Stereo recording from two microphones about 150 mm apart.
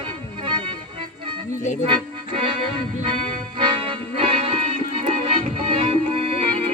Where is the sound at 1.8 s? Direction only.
35° right (ahead or behind).